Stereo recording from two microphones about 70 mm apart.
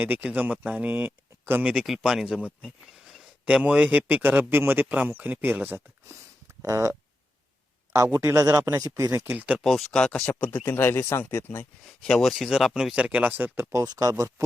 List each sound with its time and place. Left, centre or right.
0.0 s a man's voice: right
1.8 s speech: centre
2.6 s a sound: centre
3.4 s a man's voice: centre
6.6 s speech: right
7.9 s speech: right
9.3 s a man's voice: right
9.6 s speech: centre
10.4 s speech: left
11.9 s speech: centre; by 13.7 s right
13.8 s speech: right